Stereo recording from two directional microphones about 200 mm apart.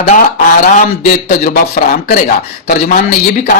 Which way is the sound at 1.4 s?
45° left (ahead or behind).